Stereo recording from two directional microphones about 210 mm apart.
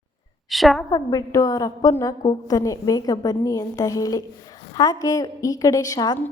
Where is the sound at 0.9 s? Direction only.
15° left (ahead or behind).